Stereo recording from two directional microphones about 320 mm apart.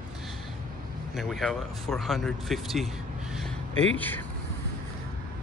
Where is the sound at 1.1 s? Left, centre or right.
Centre.